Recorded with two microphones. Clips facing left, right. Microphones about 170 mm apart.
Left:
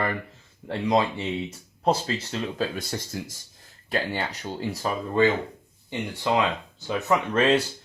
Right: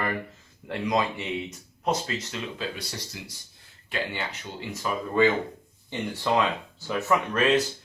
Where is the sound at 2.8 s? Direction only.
50° left (ahead or behind).